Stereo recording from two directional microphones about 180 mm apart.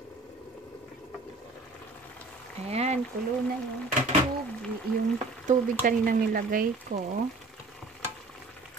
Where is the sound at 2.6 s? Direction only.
35° right (ahead or behind).